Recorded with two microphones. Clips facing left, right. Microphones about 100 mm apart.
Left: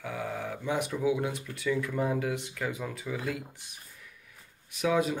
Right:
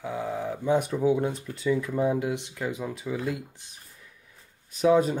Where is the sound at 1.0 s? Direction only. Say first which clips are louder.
Right 4 dB; 35° right (ahead or behind).